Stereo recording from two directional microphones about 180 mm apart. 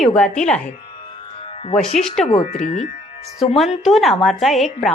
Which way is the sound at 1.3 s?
30° left (ahead or behind).